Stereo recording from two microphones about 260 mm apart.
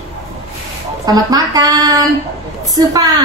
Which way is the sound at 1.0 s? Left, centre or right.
Centre.